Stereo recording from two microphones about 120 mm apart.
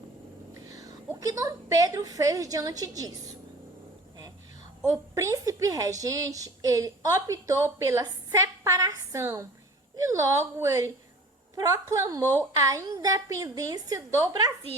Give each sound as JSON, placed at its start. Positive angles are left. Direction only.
{"t": 0.7, "sound": "a sound", "side_deg": -30}
{"t": 1.2, "sound": "a woman's voice", "side_deg": -30}
{"t": 5.1, "sound": "a woman's voice", "side_deg": -25}